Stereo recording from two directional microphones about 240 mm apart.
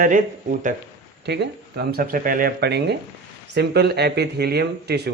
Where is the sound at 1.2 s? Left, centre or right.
Right.